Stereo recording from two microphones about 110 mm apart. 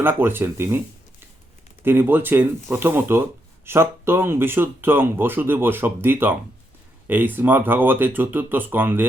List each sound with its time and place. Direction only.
0.0 s speech: 20° right (ahead or behind)
1.8 s speech: 20° right (ahead or behind)